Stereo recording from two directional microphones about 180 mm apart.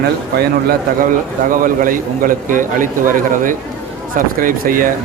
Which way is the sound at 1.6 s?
50° right (ahead or behind).